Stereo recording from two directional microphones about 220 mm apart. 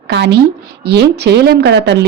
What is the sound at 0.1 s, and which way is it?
A woman's voice, 50° right (ahead or behind).